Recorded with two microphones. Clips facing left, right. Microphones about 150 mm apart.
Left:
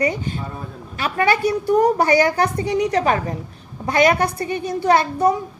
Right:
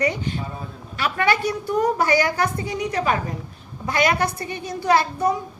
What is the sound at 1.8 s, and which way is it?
A woman's voice, 35° left (ahead or behind).